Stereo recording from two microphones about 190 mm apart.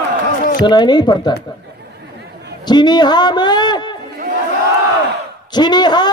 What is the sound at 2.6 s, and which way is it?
A man's voice, 20° left (ahead or behind).